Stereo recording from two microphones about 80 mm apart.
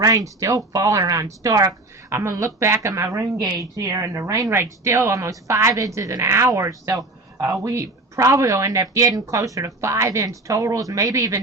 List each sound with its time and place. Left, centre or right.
0.0 s a woman's voice: right